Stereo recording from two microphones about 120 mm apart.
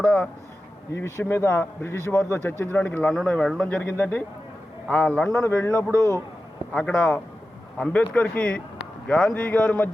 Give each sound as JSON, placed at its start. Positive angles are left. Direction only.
{"t": 0.0, "sound": "speech", "side_deg": 10}
{"t": 0.9, "sound": "speech", "side_deg": 20}
{"t": 5.3, "sound": "speech", "side_deg": 20}
{"t": 6.7, "sound": "speech", "side_deg": 10}